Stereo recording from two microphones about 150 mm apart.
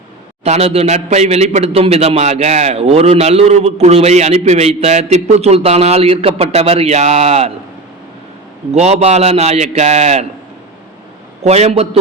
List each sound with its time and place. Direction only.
0.4 s a man's voice: 45° right (ahead or behind)
8.7 s a man's voice: 45° right (ahead or behind)
11.4 s a man's voice: 45° right (ahead or behind)